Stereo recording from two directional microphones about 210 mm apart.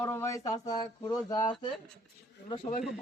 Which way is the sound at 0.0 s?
10° left (ahead or behind).